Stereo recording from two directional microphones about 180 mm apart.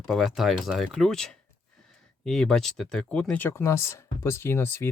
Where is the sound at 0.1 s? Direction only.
Centre (ahead or behind).